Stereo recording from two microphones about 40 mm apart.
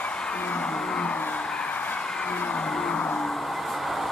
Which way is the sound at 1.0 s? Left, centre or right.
Left.